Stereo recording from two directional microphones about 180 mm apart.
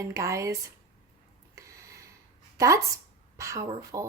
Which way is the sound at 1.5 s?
15° right (ahead or behind).